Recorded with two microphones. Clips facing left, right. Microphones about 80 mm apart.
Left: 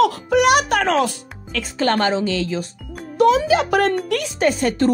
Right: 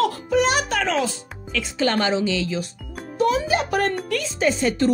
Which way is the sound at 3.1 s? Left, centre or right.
Left.